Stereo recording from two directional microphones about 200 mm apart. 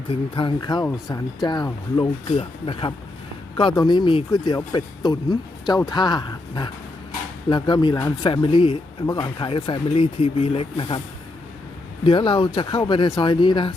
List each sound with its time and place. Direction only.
0.1 s speech: 25° left (ahead or behind)
12.0 s speech: 25° left (ahead or behind)